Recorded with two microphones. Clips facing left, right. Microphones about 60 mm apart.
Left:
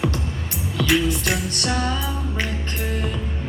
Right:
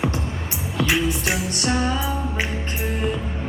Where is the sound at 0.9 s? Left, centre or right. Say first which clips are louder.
Left 2 dB; centre.